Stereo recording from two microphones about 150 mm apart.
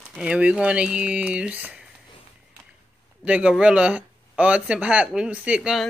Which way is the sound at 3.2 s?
5° right (ahead or behind).